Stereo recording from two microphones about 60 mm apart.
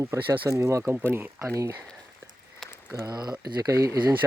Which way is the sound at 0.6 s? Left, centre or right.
Right.